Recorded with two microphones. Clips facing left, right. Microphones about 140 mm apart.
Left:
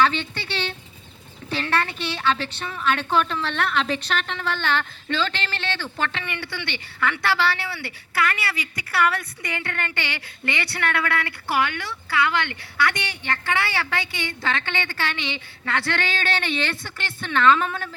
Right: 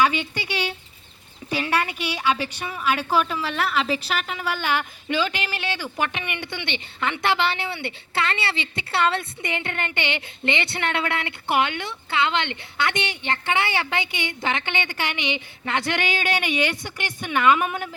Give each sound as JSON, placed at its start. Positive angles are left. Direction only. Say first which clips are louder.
{"t": 0.0, "sound": "a woman's voice", "louder": "even", "side_deg": -10}